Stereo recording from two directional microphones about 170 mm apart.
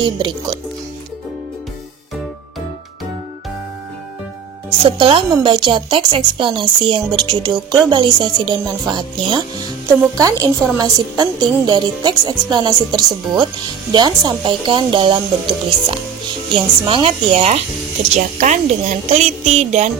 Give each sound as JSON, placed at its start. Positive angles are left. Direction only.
{"t": 0.0, "sound": "a woman's voice", "side_deg": -25}
{"t": 4.8, "sound": "a woman's voice", "side_deg": -30}